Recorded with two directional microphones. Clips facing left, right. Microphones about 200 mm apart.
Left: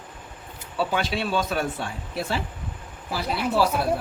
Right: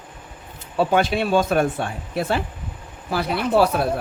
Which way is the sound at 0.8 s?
50° right (ahead or behind).